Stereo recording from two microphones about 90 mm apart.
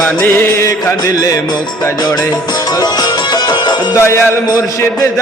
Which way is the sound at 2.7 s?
50° left (ahead or behind).